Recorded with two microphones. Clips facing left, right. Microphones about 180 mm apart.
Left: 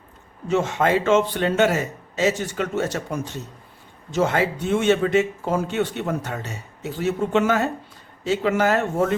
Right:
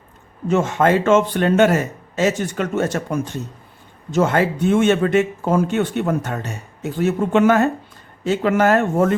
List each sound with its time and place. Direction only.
0.4 s speech: 50° right (ahead or behind)